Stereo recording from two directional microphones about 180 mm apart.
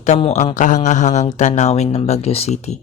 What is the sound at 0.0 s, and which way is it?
Speech, 35° left (ahead or behind).